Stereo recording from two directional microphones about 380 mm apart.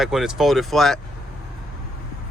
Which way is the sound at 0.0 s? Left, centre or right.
Centre.